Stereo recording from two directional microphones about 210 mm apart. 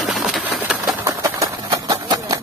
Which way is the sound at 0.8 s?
15° right (ahead or behind).